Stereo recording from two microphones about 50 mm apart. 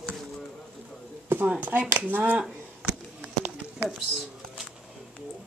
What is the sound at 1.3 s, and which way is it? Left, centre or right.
Speech, right.